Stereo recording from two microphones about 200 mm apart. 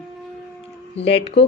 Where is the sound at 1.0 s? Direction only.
30° left (ahead or behind).